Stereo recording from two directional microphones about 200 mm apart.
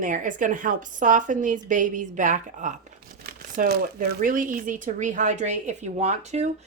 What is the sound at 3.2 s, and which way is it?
Crumpling, 50° right (ahead or behind).